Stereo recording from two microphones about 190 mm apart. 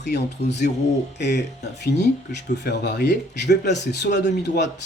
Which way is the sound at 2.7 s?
60° left (ahead or behind).